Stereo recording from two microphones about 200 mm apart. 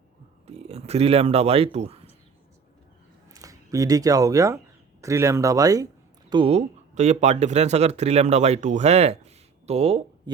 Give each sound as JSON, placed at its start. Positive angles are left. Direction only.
{"t": 0.4, "sound": "speech", "side_deg": -30}
{"t": 3.3, "sound": "speech", "side_deg": -15}
{"t": 6.3, "sound": "speech", "side_deg": -30}